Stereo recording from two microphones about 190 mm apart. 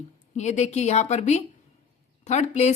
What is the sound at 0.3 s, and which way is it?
A woman's voice, 35° left (ahead or behind).